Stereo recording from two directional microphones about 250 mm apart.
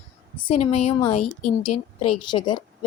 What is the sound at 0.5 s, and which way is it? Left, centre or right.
A woman's voice, left.